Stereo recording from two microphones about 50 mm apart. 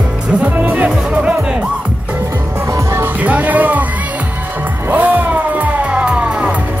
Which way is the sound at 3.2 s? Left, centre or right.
Right.